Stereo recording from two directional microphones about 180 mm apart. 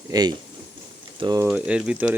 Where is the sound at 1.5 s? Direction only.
5° right (ahead or behind).